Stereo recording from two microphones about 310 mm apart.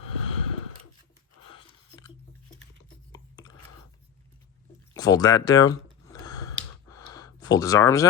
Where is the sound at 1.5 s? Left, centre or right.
Centre.